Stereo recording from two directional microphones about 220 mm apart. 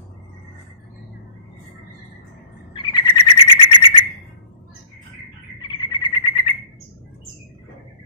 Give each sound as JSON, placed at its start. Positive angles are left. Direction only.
{"t": 2.7, "sound": "bird", "side_deg": 20}
{"t": 5.6, "sound": "frog", "side_deg": 20}